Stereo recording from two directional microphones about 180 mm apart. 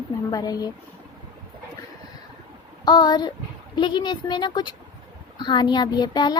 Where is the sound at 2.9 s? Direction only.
25° left (ahead or behind).